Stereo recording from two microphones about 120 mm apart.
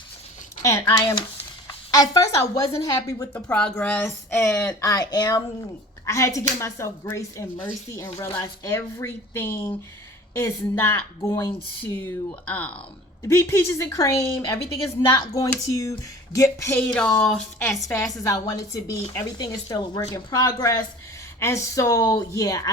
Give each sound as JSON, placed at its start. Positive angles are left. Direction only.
{"t": 0.6, "sound": "a woman's voice", "side_deg": 25}
{"t": 3.3, "sound": "speech", "side_deg": 10}
{"t": 4.8, "sound": "speech", "side_deg": 35}
{"t": 13.2, "sound": "speech", "side_deg": 25}
{"t": 17.8, "sound": "speech", "side_deg": 25}
{"t": 21.3, "sound": "speech", "side_deg": 25}